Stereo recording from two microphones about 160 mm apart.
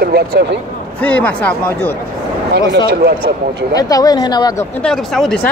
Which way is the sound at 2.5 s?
90° right.